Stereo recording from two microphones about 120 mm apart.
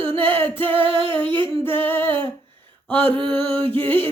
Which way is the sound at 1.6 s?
15° left (ahead or behind).